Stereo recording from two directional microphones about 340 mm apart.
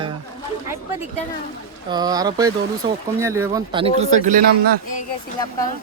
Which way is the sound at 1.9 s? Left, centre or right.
Centre.